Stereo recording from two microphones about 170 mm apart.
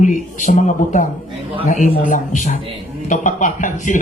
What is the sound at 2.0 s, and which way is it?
A man's voice, 50° left (ahead or behind).